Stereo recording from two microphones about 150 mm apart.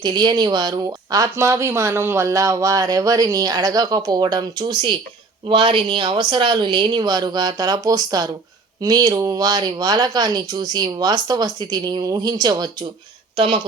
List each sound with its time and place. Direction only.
0.0 s a woman's voice: 30° right (ahead or behind)